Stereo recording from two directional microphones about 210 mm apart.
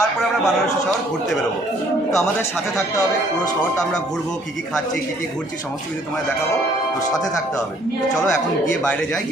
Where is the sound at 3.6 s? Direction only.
5° left (ahead or behind).